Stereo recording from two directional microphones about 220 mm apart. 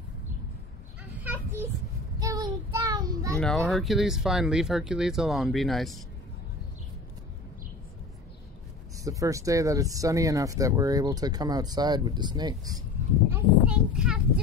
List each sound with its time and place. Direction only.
1.2 s children playing: 10° right (ahead or behind)
2.1 s child singing: 15° right (ahead or behind)
3.3 s speech: 5° left (ahead or behind)
8.9 s speech: 15° right (ahead or behind)
13.3 s speech: 5° right (ahead or behind)